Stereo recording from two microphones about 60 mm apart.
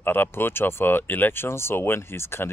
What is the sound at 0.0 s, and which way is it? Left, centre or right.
Speech, left.